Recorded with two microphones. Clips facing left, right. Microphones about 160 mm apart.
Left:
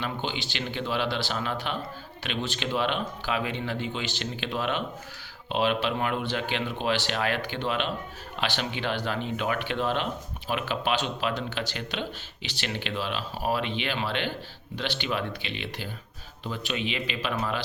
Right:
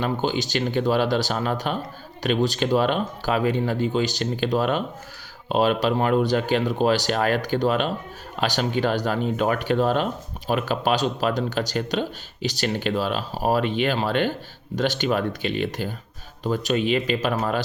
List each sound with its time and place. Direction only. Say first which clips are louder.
0.0 s speech: right 8 dB; 40° right (ahead or behind)